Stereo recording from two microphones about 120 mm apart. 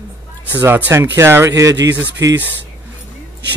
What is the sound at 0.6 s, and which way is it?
A man's voice, 20° right (ahead or behind).